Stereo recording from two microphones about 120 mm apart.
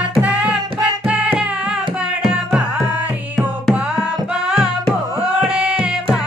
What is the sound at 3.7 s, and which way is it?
Tabla, 5° right (ahead or behind).